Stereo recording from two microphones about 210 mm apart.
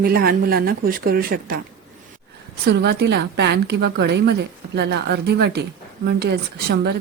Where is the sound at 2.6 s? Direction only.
55° right (ahead or behind).